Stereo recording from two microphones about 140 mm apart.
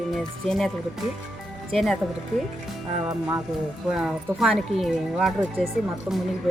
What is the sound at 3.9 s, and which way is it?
Speech, 5° right (ahead or behind).